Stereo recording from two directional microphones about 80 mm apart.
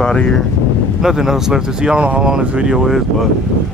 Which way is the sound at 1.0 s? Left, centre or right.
Centre.